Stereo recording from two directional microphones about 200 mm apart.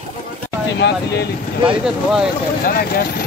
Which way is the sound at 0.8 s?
55° left (ahead or behind).